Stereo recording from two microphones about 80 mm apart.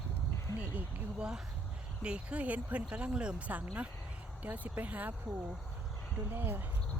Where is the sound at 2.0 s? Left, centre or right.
Centre.